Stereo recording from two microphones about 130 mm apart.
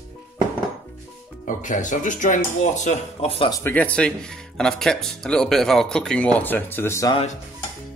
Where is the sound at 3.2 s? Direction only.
45° left (ahead or behind).